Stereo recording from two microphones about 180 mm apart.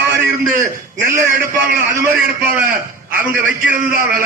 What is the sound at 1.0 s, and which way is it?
Speech, 55° right (ahead or behind).